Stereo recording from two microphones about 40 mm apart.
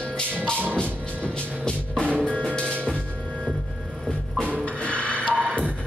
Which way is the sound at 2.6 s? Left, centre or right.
Right.